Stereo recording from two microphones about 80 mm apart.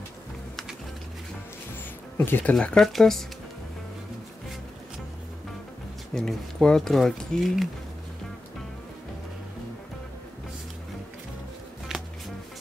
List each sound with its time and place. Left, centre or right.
2.1 s speech: left
2.6 s speech: centre
6.1 s speech: centre
11.9 s music: centre